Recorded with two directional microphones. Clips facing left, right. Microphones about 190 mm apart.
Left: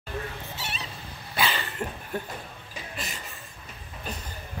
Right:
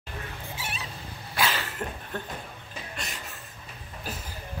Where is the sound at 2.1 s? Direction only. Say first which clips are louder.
Left 4 dB; 10° left (ahead or behind).